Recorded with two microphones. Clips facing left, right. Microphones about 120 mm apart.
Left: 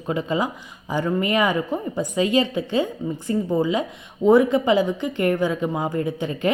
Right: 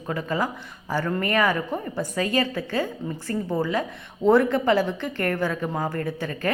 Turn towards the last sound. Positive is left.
turn(degrees=20)  # may be behind; listen again after turning